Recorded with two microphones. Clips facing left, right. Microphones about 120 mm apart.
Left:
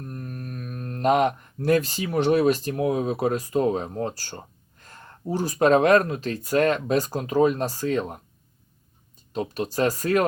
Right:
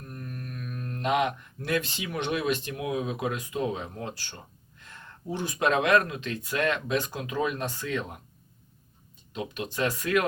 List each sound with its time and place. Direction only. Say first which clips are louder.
0.0 s speech: left 4 dB; 40° left (ahead or behind)
9.3 s speech: left 7 dB; 40° left (ahead or behind)